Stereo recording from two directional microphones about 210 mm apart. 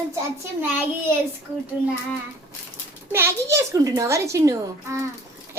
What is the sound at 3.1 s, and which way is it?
A woman's voice, 15° right (ahead or behind).